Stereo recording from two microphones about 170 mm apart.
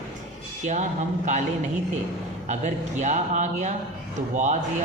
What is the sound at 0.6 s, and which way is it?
Speech, 45° right (ahead or behind).